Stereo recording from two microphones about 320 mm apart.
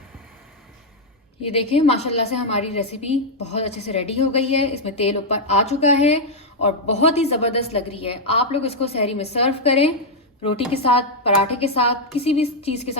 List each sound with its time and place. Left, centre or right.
1.4 s a woman's voice: centre